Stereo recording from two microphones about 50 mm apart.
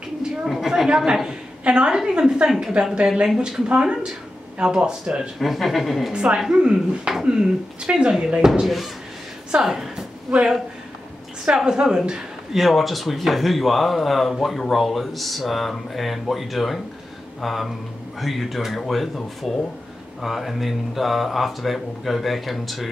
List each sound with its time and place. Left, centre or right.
0.5 s a sound: centre
0.8 s a woman's voice: centre
5.4 s speech: centre
6.1 s a woman's voice: centre
11.4 s speech: centre
12.5 s speech: centre